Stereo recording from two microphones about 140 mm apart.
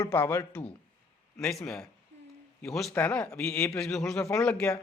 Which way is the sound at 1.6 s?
5° left (ahead or behind).